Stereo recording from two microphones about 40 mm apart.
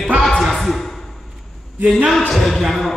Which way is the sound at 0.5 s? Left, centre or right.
Centre.